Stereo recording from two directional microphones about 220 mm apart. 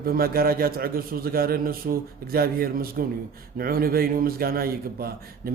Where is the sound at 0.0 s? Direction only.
45° right (ahead or behind).